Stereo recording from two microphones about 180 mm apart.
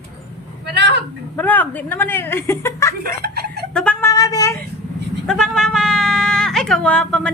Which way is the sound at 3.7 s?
5° left (ahead or behind).